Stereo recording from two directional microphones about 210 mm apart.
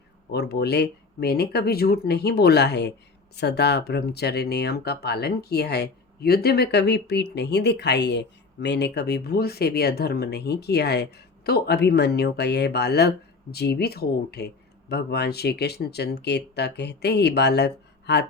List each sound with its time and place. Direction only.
0.3 s speech: 50° left (ahead or behind)